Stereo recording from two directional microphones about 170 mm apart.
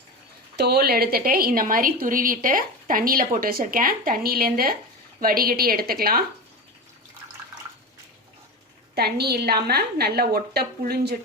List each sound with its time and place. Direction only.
0.5 s a woman's voice: 70° right (ahead or behind)
9.0 s a woman's voice: 70° right (ahead or behind)